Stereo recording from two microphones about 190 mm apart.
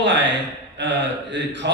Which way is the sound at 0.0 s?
65° right (ahead or behind).